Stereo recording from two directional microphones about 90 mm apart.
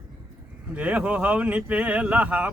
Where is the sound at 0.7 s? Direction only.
15° right (ahead or behind).